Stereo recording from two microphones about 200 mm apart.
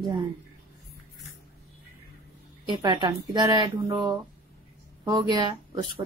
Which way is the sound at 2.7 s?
20° right (ahead or behind).